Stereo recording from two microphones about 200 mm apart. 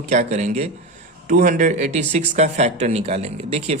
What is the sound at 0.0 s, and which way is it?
Speech, 35° right (ahead or behind).